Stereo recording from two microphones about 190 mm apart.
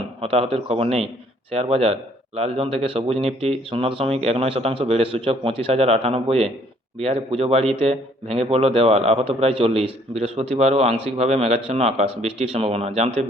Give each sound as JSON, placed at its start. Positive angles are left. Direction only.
{"t": 0.2, "sound": "a man's voice", "side_deg": -30}